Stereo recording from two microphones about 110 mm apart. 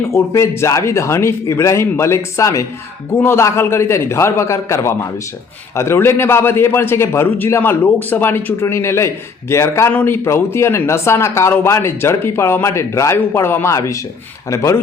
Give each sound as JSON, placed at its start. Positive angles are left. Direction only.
{"t": 0.0, "sound": "a man's voice", "side_deg": 25}
{"t": 9.9, "sound": "a man's voice", "side_deg": 15}